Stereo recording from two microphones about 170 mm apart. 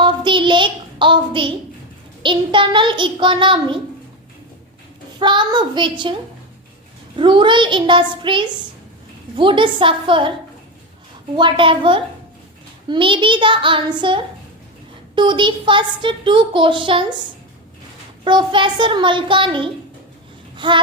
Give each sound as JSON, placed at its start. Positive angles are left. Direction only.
{"t": 0.0, "sound": "child singing", "side_deg": -30}
{"t": 2.2, "sound": "a child's voice", "side_deg": -30}
{"t": 5.2, "sound": "a child's voice", "side_deg": -25}
{"t": 7.2, "sound": "a child's voice", "side_deg": -30}
{"t": 11.3, "sound": "a child's voice", "side_deg": -30}
{"t": 18.3, "sound": "a child's voice", "side_deg": -30}
{"t": 20.6, "sound": "baby cry", "side_deg": -30}